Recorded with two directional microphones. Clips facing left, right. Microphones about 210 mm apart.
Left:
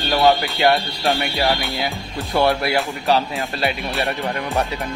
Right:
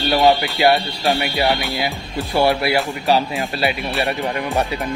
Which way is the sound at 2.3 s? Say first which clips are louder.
Right 1 dB; 15° right (ahead or behind).